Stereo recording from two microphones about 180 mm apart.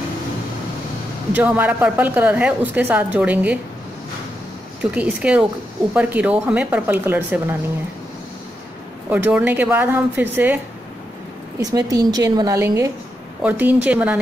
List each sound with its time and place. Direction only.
1.3 s a woman's voice: 10° right (ahead or behind)
4.9 s a woman's voice: 5° right (ahead or behind)
9.1 s a woman's voice: 10° right (ahead or behind)
11.7 s a woman's voice: 20° right (ahead or behind)